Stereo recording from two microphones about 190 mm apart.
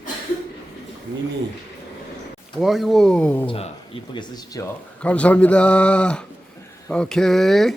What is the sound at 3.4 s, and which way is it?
Speech, 30° left (ahead or behind).